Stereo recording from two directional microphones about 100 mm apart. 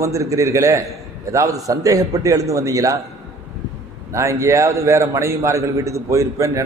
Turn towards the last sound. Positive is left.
turn(degrees=-30)  # may be behind; listen again after turning